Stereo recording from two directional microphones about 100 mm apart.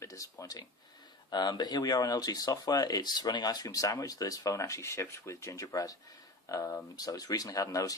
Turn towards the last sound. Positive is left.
turn(degrees=35)  # may be behind; listen again after turning